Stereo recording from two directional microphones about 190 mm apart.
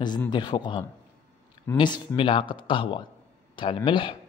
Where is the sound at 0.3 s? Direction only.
25° left (ahead or behind).